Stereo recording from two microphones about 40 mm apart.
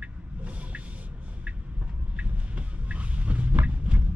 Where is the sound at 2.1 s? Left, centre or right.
Right.